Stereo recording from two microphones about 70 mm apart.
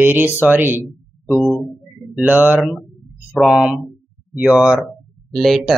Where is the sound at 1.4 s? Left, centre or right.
Centre.